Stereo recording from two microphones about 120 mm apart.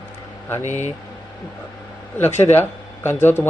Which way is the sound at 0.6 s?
80° left.